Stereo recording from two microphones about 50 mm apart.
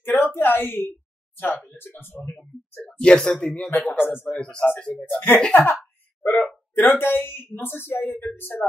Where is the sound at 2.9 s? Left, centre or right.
Centre.